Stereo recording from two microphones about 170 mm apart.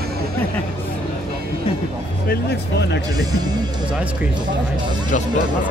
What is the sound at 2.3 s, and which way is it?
Speech, 75° left (ahead or behind).